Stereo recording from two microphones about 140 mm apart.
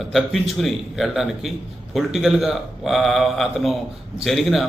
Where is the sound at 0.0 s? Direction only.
Centre (ahead or behind).